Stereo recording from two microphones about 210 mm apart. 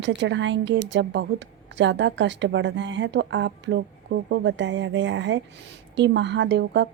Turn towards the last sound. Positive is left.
turn(degrees=-55)  # may be behind; listen again after turning